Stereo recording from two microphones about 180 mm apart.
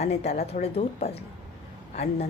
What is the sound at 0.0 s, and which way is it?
A woman's voice, 35° left (ahead or behind).